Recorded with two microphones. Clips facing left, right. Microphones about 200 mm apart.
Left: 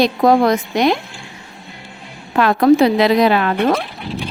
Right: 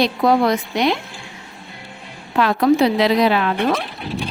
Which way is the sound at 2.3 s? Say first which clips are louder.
Left 4 dB; 50° left (ahead or behind).